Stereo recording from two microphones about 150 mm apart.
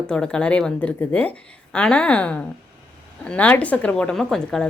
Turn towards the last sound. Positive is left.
turn(degrees=5)  # may be behind; listen again after turning